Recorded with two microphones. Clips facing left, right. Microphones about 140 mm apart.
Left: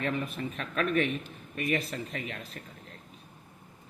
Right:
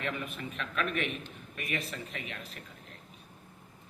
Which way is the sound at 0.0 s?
35° left (ahead or behind).